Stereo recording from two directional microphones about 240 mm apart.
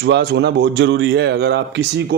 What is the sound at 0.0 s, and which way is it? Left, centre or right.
A man's voice, right.